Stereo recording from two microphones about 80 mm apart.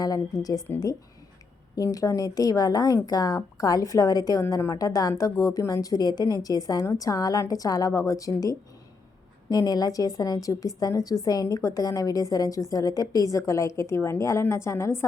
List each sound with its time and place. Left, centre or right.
0.0 s a woman's voice: left
1.7 s a woman's voice: left